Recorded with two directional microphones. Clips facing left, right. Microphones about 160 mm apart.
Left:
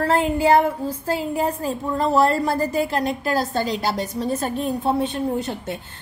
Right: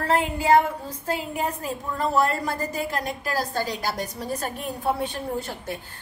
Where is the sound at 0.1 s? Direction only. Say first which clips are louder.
Left 1 dB; 30° left (ahead or behind).